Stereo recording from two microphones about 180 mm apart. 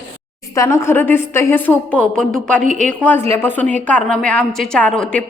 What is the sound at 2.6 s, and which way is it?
Speech, 45° right (ahead or behind).